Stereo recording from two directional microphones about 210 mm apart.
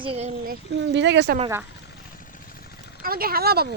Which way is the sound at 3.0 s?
45° right (ahead or behind).